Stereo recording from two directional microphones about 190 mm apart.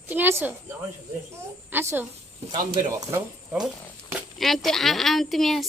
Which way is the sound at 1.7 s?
10° right (ahead or behind).